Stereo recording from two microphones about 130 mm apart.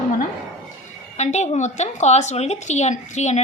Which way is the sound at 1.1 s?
60° left (ahead or behind).